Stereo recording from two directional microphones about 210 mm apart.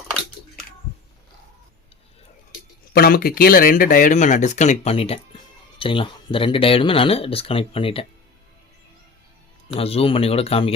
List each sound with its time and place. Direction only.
2.9 s speech: 45° left (ahead or behind); by 8.0 s 25° left (ahead or behind)
9.7 s speech: 30° left (ahead or behind)